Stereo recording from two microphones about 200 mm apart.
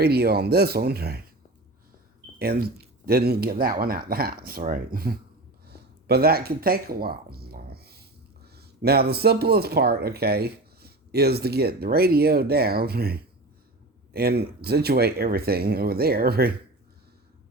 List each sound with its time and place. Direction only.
0.0 s speech: 50° right (ahead or behind)
2.4 s speech: 50° right (ahead or behind)
6.1 s a sound: 50° right (ahead or behind)
8.5 s speech: 50° right (ahead or behind)